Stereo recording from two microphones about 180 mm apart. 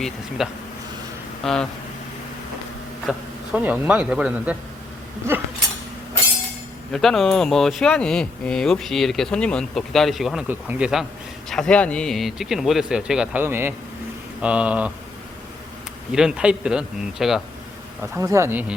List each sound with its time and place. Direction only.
0.4 s speech: 5° right (ahead or behind)
3.1 s speech: 5° right (ahead or behind)
6.9 s speech: centre (ahead or behind)
16.1 s speech: 5° right (ahead or behind)
18.2 s speech: 15° right (ahead or behind)